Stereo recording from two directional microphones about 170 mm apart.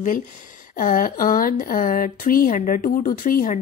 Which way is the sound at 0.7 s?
50° left (ahead or behind).